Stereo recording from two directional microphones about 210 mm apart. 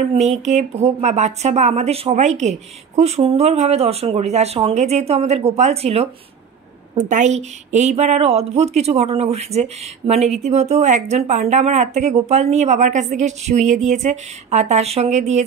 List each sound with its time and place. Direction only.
0.1 s speech: 30° right (ahead or behind)